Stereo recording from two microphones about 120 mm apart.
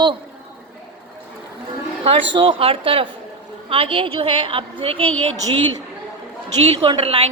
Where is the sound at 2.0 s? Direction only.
45° right (ahead or behind).